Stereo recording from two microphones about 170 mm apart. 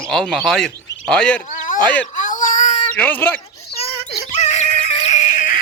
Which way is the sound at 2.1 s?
45° left (ahead or behind).